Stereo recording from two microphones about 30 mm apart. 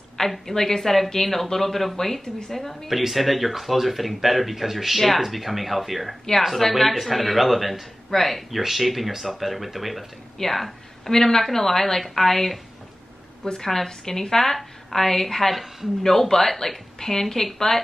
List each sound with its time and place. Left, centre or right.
0.3 s a woman's voice: centre
2.9 s speech: centre
11.1 s a woman's voice: centre
13.6 s a woman's voice: centre
15.5 s speech: centre
16.0 s a woman's voice: centre